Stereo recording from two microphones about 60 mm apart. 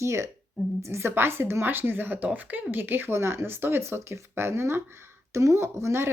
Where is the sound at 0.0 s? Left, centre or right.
Right.